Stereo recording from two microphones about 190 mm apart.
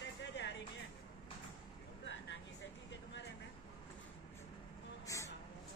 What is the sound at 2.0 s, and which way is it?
Vehicle, 75° left (ahead or behind).